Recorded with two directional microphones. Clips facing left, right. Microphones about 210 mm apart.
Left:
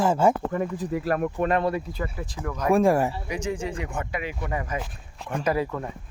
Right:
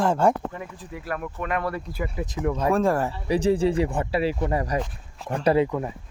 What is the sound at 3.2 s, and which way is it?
Speech, 35° right (ahead or behind).